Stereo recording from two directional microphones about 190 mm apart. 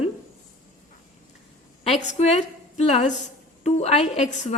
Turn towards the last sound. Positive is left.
turn(degrees=35)  # may be behind; listen again after turning